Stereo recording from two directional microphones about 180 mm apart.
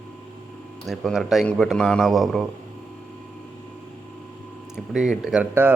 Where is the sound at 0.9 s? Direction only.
Centre (ahead or behind).